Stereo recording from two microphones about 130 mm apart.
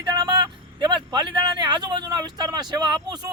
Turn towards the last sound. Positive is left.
turn(degrees=-30)  # may be behind; listen again after turning